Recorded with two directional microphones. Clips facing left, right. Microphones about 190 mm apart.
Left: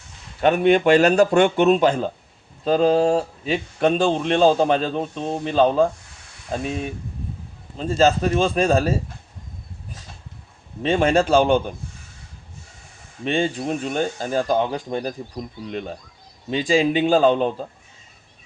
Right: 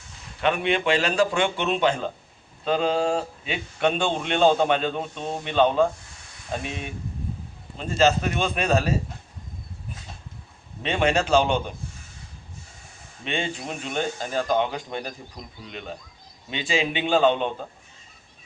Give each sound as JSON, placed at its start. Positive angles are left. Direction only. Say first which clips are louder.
{"t": 0.4, "sound": "speech", "louder": "left 7 dB", "side_deg": 45}
{"t": 10.8, "sound": "speech", "louder": "left 5 dB", "side_deg": 45}
{"t": 13.2, "sound": "speech", "louder": "left 7 dB", "side_deg": 35}
{"t": 16.5, "sound": "speech", "louder": "left 7 dB", "side_deg": 40}